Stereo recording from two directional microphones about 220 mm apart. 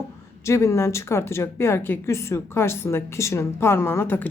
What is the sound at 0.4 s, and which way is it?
Speech, 10° left (ahead or behind).